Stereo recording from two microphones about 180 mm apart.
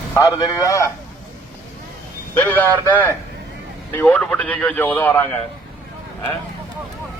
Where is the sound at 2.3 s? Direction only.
10° left (ahead or behind).